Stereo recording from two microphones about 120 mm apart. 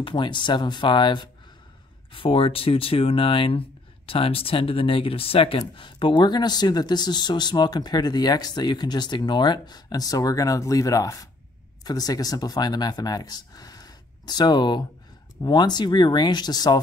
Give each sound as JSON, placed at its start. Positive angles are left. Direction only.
{"t": 0.0, "sound": "speech", "side_deg": 40}
{"t": 2.1, "sound": "speech", "side_deg": 50}